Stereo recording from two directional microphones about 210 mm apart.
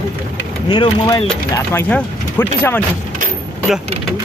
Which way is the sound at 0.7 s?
20° left (ahead or behind).